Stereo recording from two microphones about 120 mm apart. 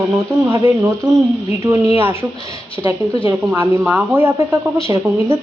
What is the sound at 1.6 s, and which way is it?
Speech, 25° right (ahead or behind).